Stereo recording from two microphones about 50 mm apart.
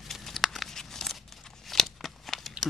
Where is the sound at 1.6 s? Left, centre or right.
Centre.